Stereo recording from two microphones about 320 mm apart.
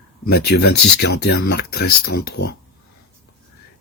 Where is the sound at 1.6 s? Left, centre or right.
Left.